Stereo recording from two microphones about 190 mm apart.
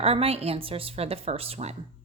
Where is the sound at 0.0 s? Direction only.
30° right (ahead or behind).